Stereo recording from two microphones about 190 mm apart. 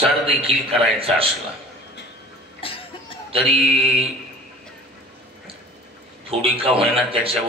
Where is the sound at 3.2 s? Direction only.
30° right (ahead or behind).